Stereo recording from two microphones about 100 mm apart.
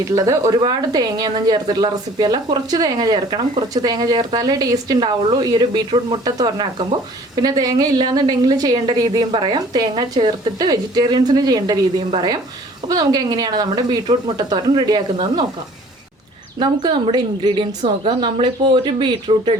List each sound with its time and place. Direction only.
0.0 s a woman's voice: 30° right (ahead or behind)
16.6 s a woman's voice: 45° right (ahead or behind)